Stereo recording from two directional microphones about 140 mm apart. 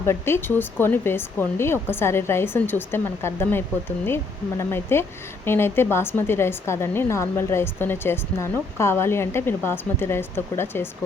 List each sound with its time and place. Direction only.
0.0 s a woman's voice: 20° left (ahead or behind)